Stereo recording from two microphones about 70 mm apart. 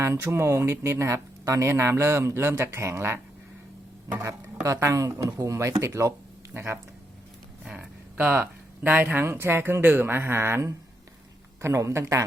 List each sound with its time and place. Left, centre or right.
0.0 s speech: right
4.6 s speech: right
6.5 s speech: right
7.6 s speech: centre
8.1 s speech: right